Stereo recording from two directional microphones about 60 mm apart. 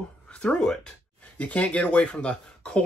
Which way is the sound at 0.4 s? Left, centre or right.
Centre.